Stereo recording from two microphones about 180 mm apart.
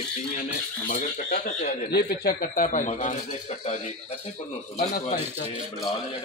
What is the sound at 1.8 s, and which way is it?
Speech, 60° left (ahead or behind).